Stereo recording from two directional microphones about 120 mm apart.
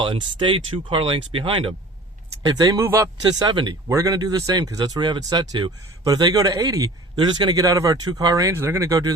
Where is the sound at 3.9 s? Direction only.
25° right (ahead or behind).